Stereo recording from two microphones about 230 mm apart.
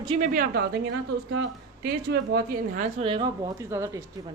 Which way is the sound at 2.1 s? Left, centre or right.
Right.